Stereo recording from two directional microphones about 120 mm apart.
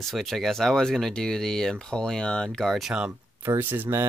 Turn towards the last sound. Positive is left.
turn(degrees=-15)  # may be behind; listen again after turning